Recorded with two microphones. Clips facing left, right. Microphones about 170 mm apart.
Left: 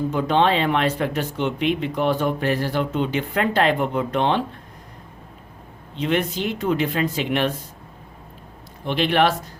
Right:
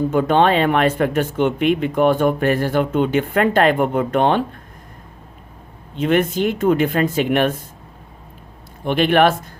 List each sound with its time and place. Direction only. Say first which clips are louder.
0.1 s speech: right 3 dB; 50° right (ahead or behind)
6.0 s speech: right 5 dB; 50° right (ahead or behind)
8.8 s speech: right 4 dB; 50° right (ahead or behind)